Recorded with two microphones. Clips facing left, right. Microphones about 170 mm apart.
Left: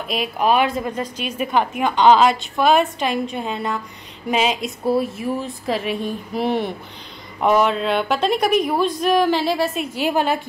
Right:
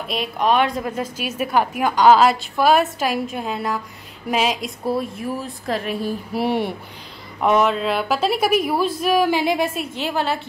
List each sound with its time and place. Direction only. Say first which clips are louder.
0.1 s a woman's voice: left 1 dB; 5° left (ahead or behind)
7.3 s a woman's voice: left 1 dB; centre (ahead or behind); by 9.7 s 15° right (ahead or behind)
9.9 s a woman's voice: left 4 dB; 15° left (ahead or behind)